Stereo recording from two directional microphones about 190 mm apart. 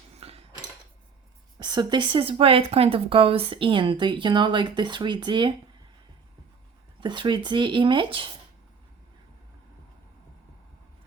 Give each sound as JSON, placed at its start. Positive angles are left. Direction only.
{"t": 0.2, "sound": "a sound", "side_deg": -30}
{"t": 1.5, "sound": "speech", "side_deg": -25}
{"t": 7.0, "sound": "speech", "side_deg": -25}